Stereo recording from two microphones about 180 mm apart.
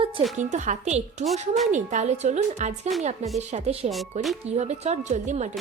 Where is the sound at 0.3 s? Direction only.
45° right (ahead or behind).